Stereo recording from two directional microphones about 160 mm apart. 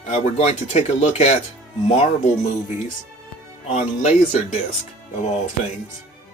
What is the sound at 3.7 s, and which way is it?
Speech, 40° left (ahead or behind).